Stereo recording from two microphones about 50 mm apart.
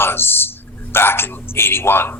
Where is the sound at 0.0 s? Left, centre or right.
Left.